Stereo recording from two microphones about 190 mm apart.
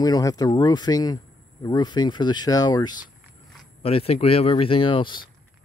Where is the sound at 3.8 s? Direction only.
30° left (ahead or behind).